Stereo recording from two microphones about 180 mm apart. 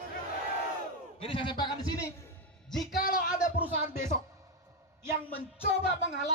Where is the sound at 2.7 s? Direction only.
Centre (ahead or behind).